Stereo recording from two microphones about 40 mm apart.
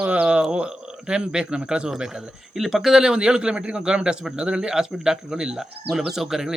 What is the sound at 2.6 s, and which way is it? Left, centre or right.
A man's voice, centre.